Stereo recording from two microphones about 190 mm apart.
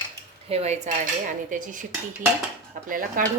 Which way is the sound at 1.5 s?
45° right (ahead or behind).